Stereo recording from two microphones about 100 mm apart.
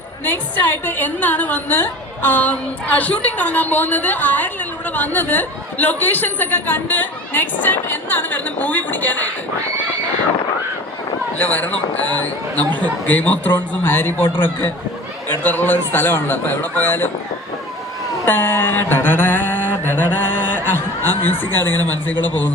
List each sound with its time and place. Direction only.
0.3 s speech: 20° left (ahead or behind)
11.3 s a man's voice: 15° left (ahead or behind)
18.3 s a sound: 20° left (ahead or behind)
21.2 s a man's voice: 20° left (ahead or behind)
21.6 s speech: 40° right (ahead or behind)
22.2 s speech: 15° left (ahead or behind)